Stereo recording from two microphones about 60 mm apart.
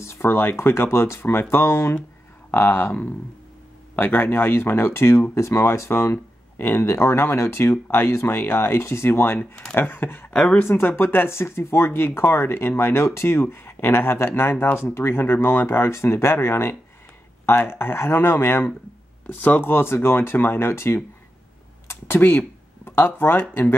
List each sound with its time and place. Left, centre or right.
0.0 s speech: left
19.2 s speech: left